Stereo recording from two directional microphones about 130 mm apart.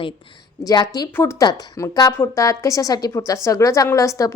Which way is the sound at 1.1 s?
20° left (ahead or behind).